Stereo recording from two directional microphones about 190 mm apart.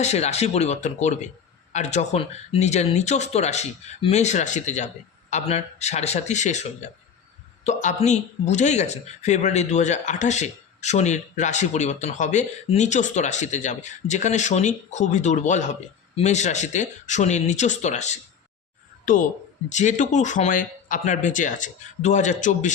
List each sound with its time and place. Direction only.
0.0 s speech: 35° left (ahead or behind)